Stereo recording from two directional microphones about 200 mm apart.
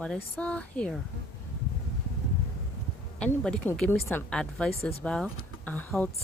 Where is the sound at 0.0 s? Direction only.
5° left (ahead or behind).